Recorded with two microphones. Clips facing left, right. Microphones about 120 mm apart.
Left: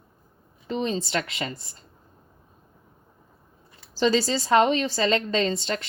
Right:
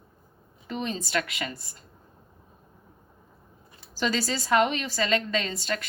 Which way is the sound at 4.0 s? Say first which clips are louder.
Left 6 dB; 30° left (ahead or behind).